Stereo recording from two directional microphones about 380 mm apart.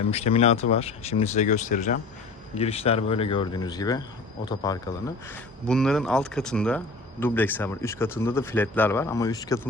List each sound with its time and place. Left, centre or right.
0.0 s speech: centre